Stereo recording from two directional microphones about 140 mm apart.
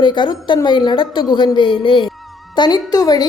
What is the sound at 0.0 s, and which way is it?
A woman's voice, 35° left (ahead or behind).